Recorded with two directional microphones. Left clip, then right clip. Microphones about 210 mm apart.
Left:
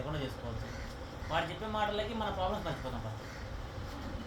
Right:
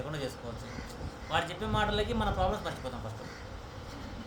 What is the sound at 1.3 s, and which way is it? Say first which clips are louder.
Speech: right 3 dB; 35° right (ahead or behind).